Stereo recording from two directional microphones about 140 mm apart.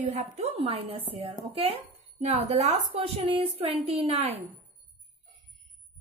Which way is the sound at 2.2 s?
55° right (ahead or behind).